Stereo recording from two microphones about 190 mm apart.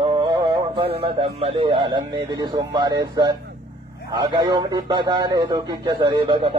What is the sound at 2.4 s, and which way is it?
A man's voice, 20° right (ahead or behind).